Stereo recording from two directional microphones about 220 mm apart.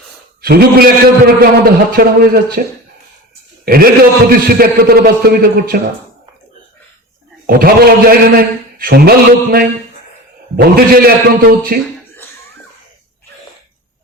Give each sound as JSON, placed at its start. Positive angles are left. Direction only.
{"t": 0.4, "sound": "a man's voice", "side_deg": -45}
{"t": 4.3, "sound": "a man's voice", "side_deg": -45}
{"t": 7.4, "sound": "a man's voice", "side_deg": -45}